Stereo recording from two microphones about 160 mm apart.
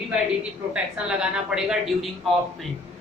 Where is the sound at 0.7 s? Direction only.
5° right (ahead or behind).